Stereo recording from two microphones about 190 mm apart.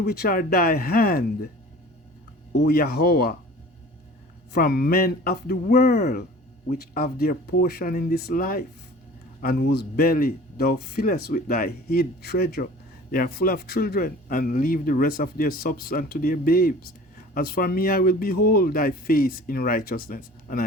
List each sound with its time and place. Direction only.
0.0 s speech: 55° left (ahead or behind)
2.5 s speech: 60° left (ahead or behind)
4.5 s speech: 55° left (ahead or behind)